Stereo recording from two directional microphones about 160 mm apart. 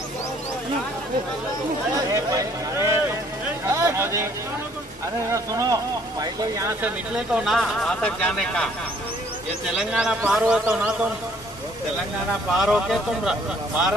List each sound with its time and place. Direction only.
2.3 s speech: 20° right (ahead or behind)
3.6 s a sound: 15° right (ahead or behind)
5.3 s speech: 20° right (ahead or behind)
7.2 s speech: 5° right (ahead or behind)
9.8 s speech: 5° right (ahead or behind)
12.5 s speech: 5° right (ahead or behind)